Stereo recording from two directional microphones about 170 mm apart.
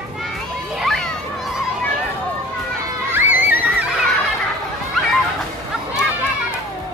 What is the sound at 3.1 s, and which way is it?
Music, 10° right (ahead or behind).